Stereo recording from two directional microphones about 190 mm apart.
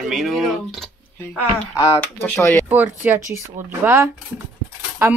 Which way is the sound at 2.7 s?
10° right (ahead or behind).